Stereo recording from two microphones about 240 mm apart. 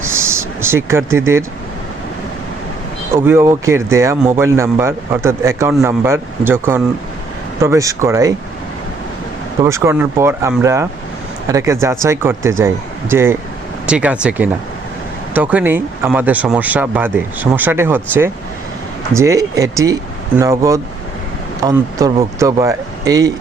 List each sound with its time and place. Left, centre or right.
0.0 s a sound: centre
3.2 s speech: centre
9.6 s speech: centre